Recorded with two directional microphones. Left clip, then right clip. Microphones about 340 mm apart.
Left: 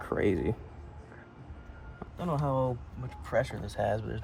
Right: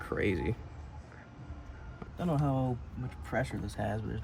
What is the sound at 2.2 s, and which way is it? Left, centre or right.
Speech, centre.